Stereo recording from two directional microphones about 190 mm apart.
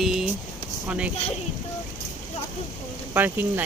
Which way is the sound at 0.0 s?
Centre (ahead or behind).